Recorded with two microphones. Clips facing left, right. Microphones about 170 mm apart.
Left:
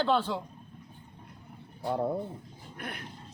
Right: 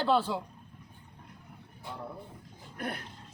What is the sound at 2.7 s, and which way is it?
Dog, 40° right (ahead or behind).